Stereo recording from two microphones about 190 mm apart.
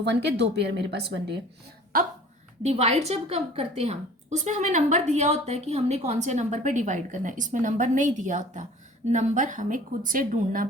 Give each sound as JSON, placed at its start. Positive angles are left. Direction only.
{"t": 0.0, "sound": "speech", "side_deg": -65}
{"t": 1.9, "sound": "a woman's voice", "side_deg": -50}
{"t": 2.6, "sound": "a woman's voice", "side_deg": -35}